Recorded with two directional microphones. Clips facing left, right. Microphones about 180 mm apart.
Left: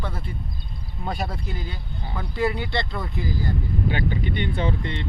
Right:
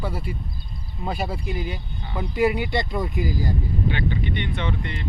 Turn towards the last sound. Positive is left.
turn(degrees=30)  # may be behind; listen again after turning